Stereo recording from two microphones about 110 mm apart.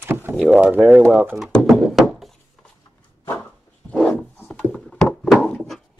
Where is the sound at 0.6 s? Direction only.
15° right (ahead or behind).